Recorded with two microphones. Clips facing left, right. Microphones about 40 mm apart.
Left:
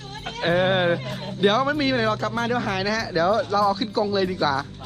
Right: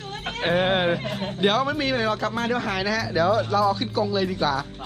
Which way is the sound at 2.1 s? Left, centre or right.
Centre.